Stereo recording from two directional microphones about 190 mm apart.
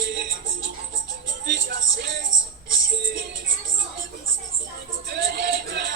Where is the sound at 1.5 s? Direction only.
50° right (ahead or behind).